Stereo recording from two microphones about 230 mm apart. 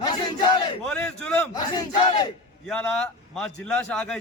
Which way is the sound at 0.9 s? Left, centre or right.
Centre.